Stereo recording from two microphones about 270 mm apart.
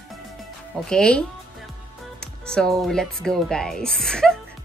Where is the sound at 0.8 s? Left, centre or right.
Centre.